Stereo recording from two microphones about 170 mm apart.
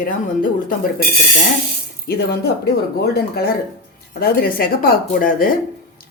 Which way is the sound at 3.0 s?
65° left (ahead or behind).